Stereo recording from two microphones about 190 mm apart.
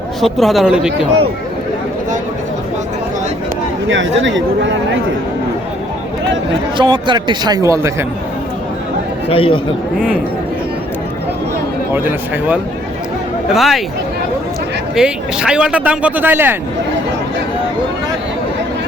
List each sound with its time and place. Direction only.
0.2 s speech: centre (ahead or behind)
3.8 s speech: 75° right (ahead or behind)
6.7 s speech: 25° right (ahead or behind)
9.3 s speech: 30° left (ahead or behind)
13.5 s speech: centre (ahead or behind)
14.9 s a man's voice: 5° right (ahead or behind)